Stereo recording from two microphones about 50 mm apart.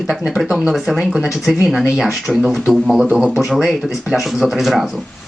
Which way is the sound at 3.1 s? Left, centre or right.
Right.